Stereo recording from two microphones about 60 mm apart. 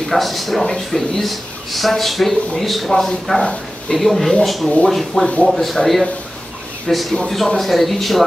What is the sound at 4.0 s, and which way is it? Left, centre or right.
A man's voice, centre.